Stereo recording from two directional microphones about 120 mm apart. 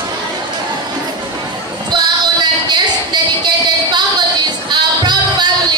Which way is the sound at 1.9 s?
35° right (ahead or behind).